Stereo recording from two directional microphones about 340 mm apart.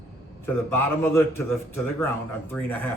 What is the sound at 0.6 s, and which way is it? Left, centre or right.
Speech, centre.